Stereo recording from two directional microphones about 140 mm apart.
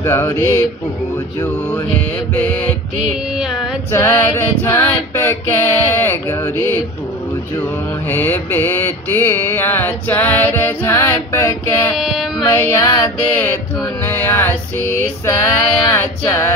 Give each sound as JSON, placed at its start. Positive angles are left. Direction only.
{"t": 0.0, "sound": "female singing", "side_deg": 20}
{"t": 3.1, "sound": "a sound", "side_deg": -5}
{"t": 3.9, "sound": "female singing", "side_deg": 20}
{"t": 8.1, "sound": "mantra", "side_deg": 15}
{"t": 12.0, "sound": "mantra", "side_deg": 0}
{"t": 12.5, "sound": "female singing", "side_deg": 20}